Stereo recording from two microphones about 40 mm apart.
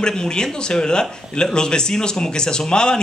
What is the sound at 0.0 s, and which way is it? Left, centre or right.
Speech, centre.